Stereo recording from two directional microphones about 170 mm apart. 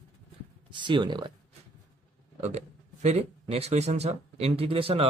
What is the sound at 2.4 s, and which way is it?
Speech, 40° right (ahead or behind).